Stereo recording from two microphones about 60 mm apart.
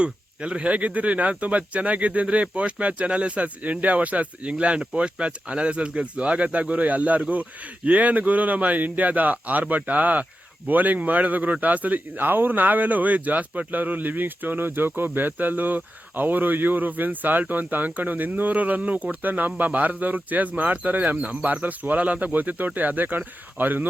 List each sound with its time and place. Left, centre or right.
0.0 s a man's voice: centre